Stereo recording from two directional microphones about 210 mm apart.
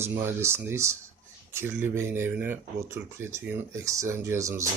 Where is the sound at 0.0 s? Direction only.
10° right (ahead or behind).